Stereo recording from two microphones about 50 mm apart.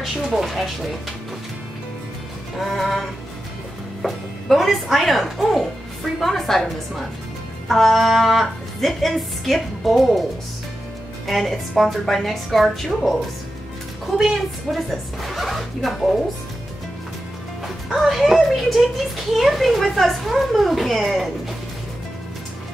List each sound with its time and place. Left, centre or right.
0.0 s a child's voice: centre
2.6 s a child's voice: centre
11.2 s a child's voice: centre
14.1 s a child's voice: centre
17.9 s a child's voice: centre